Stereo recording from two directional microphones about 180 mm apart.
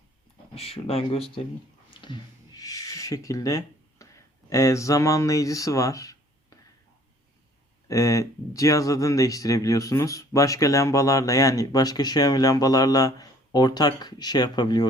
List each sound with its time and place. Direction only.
0.5 s speech: 35° left (ahead or behind)
1.9 s a sound: 25° left (ahead or behind)
7.9 s speech: 20° left (ahead or behind)